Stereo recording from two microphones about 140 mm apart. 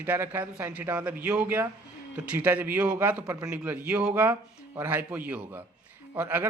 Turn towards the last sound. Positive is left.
turn(degrees=-15)  # may be behind; listen again after turning